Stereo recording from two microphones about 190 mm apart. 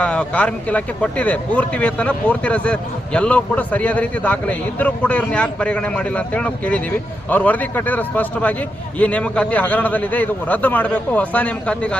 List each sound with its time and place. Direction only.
0.0 s speech: 5° left (ahead or behind)